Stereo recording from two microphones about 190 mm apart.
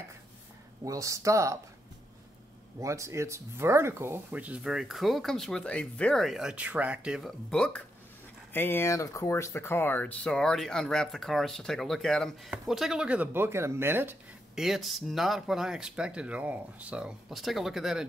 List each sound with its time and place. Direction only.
0.8 s speech: 15° right (ahead or behind)
2.8 s speech: 15° right (ahead or behind)